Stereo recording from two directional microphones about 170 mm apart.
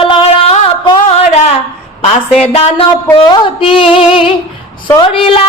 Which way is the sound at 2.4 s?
35° left (ahead or behind).